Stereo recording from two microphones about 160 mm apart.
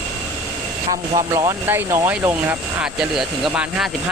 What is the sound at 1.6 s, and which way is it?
Speech, 15° right (ahead or behind).